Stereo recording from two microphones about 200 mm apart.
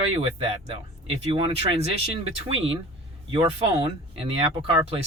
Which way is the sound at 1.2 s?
25° right (ahead or behind).